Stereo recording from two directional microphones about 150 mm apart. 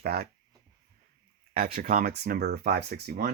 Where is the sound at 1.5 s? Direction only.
75° right (ahead or behind); by 3.3 s 90° right.